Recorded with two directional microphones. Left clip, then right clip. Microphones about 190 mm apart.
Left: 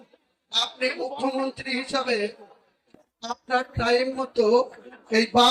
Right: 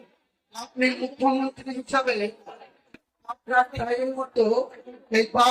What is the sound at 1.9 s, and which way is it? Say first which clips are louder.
Speech: right 3 dB; 70° left (ahead or behind).